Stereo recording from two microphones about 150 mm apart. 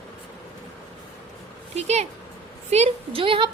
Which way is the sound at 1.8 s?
45° right (ahead or behind).